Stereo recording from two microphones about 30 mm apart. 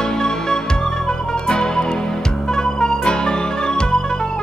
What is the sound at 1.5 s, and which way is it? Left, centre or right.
Music, left.